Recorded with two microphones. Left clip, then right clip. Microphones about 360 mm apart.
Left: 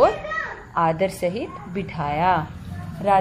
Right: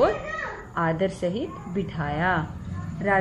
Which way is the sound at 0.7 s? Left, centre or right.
Left.